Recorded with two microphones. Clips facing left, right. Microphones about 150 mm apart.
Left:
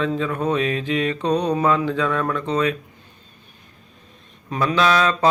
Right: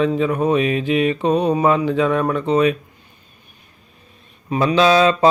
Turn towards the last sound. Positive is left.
turn(degrees=-20)  # may be behind; listen again after turning